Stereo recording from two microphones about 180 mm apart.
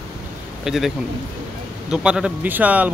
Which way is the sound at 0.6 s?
Centre (ahead or behind).